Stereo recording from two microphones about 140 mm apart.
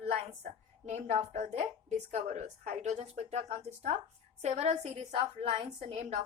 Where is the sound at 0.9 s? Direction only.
55° right (ahead or behind).